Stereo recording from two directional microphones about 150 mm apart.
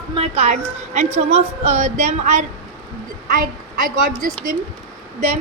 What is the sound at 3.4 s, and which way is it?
A woman's voice, 65° right (ahead or behind).